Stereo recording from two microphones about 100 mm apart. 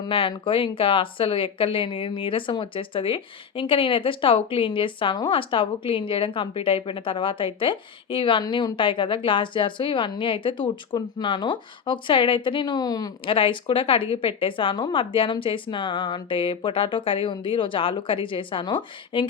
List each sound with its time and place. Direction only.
0.1 s a woman's voice: 60° left (ahead or behind); by 13.1 s 40° left (ahead or behind)
13.2 s a woman's voice: 60° left (ahead or behind)